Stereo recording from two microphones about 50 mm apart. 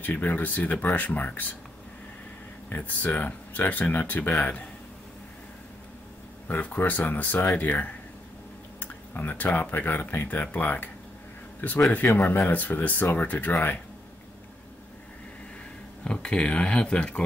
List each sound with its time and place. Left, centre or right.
0.0 s speech: left
2.7 s speech: left
6.4 s speech: left
11.9 s speech: left
16.0 s speech: centre